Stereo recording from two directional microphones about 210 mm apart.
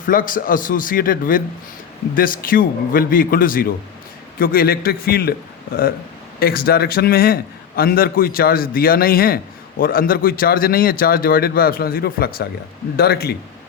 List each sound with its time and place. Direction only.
0.0 s a man's voice: 40° left (ahead or behind)
6.4 s a man's voice: 45° left (ahead or behind)